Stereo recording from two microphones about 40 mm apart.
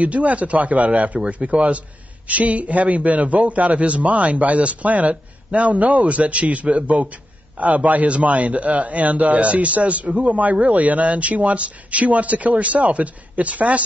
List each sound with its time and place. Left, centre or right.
0.0 s a man's voice: right